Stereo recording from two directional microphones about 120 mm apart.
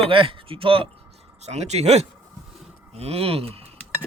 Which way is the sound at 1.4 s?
65° right (ahead or behind).